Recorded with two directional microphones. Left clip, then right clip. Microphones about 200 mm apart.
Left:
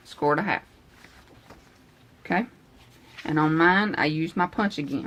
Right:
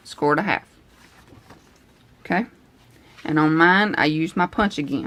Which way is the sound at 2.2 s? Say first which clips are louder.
Right 3 dB; 20° right (ahead or behind).